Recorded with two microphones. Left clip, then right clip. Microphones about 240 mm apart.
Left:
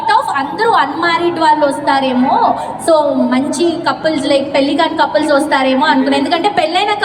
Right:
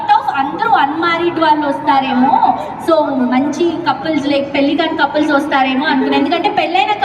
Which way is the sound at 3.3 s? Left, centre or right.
Centre.